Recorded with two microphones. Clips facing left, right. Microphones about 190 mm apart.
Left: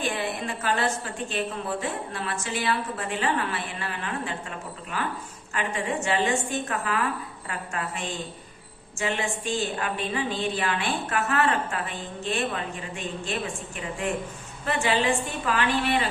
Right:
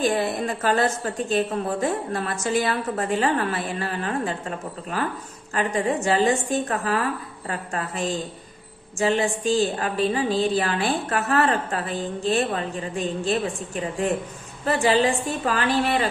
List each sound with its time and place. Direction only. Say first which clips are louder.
0.0 s a woman's voice: right 6 dB; 40° right (ahead or behind)